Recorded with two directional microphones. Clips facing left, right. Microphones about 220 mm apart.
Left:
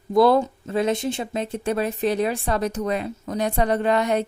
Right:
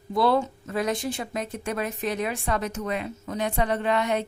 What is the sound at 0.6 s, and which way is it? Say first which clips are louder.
Speech: left 5 dB; 25° left (ahead or behind).